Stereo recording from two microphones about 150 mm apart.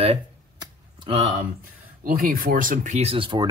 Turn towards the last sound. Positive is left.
turn(degrees=-35)  # may be behind; listen again after turning